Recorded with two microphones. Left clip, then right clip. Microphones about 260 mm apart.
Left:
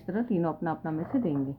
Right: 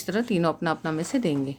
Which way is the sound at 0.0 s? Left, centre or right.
Right.